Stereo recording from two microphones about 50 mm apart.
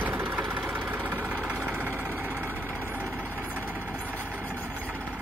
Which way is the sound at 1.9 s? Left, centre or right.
Right.